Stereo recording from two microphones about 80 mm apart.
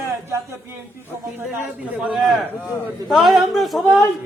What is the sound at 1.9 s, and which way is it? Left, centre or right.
A man's voice, centre.